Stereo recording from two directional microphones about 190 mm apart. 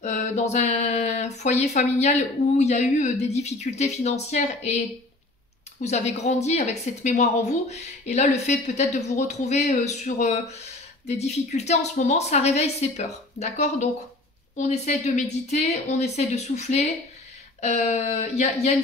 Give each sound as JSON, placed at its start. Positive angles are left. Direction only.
{"t": 0.0, "sound": "speech", "side_deg": 40}